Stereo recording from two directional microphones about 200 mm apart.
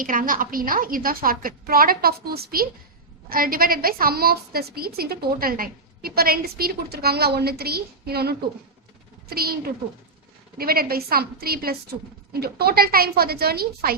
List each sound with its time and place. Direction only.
0.0 s a woman's voice: 45° right (ahead or behind)